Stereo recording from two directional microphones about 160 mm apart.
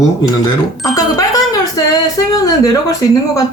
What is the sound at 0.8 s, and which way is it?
Doorbell, 20° left (ahead or behind).